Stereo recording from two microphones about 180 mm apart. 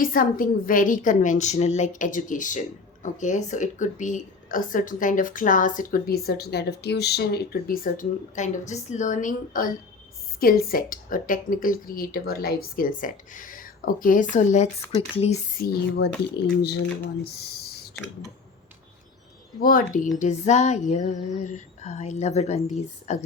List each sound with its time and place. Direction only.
0.0 s speech: 50° left (ahead or behind); by 15.4 s 35° left (ahead or behind)
15.6 s speech: 55° left (ahead or behind)
19.6 s speech: 50° left (ahead or behind)
20.1 s female singing: 40° left (ahead or behind)